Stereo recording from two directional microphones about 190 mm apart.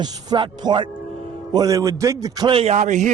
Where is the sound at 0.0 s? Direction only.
25° right (ahead or behind).